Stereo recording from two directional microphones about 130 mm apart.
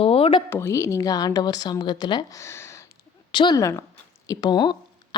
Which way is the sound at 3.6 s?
25° left (ahead or behind).